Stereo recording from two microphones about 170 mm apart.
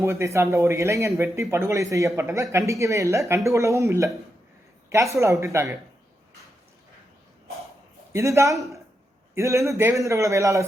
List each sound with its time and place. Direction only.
0.0 s speech: 15° right (ahead or behind)
8.1 s speech: 15° right (ahead or behind)